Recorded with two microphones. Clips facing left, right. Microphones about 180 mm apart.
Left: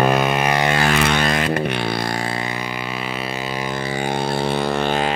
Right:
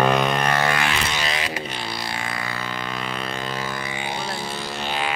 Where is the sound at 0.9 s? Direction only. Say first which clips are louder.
Left 8 dB; 55° left (ahead or behind).